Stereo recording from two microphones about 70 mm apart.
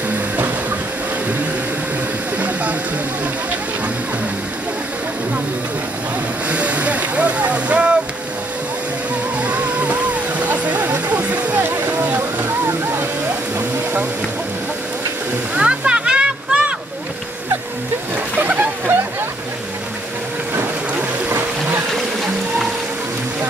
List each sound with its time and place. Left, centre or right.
2.3 s a sound: right
6.5 s vehicle: centre
9.4 s music: centre
11.6 s a sound: right
15.5 s waterfall: centre
18.4 s splash: right
21.3 s music: right